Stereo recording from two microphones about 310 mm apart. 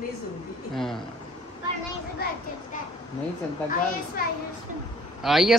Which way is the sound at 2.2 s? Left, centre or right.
Left.